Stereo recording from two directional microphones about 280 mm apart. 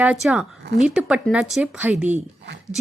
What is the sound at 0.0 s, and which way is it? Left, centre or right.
A woman's voice, centre.